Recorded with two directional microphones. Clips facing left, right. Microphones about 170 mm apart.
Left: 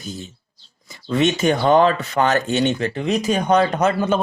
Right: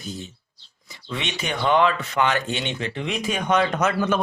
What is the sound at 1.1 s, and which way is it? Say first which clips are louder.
Speech: left 11 dB; 45° left (ahead or behind).